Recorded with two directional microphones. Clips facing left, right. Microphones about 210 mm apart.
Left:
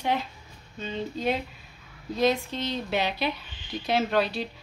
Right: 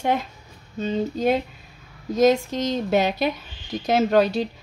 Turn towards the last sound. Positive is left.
turn(degrees=-45)  # may be behind; listen again after turning